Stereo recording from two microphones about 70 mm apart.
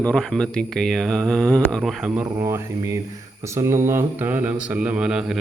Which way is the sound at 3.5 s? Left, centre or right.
Right.